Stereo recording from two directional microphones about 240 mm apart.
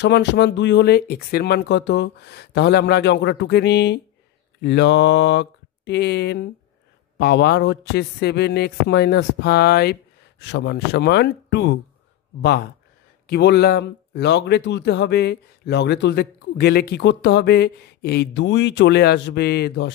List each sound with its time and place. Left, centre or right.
0.0 s speech: left